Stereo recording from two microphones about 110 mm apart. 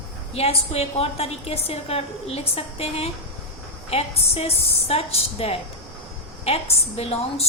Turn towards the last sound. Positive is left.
turn(degrees=70)  # may be behind; listen again after turning